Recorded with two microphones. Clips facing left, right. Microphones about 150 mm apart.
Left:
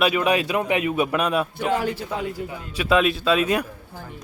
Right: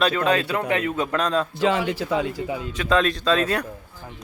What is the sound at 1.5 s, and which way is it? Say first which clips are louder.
Speech: right 2 dB; 90° right.